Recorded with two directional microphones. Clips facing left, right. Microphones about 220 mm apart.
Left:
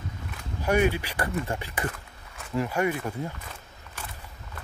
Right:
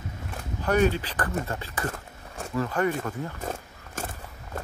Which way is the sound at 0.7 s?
10° left (ahead or behind).